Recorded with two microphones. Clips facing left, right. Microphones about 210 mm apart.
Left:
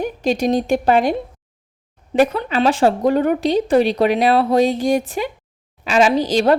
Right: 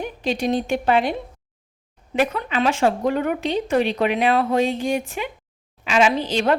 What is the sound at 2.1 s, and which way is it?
A woman's voice, 35° left (ahead or behind).